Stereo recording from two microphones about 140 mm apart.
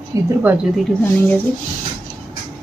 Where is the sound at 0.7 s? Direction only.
10° left (ahead or behind).